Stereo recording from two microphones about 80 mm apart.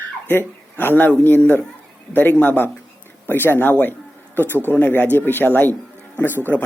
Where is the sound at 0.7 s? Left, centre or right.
Left.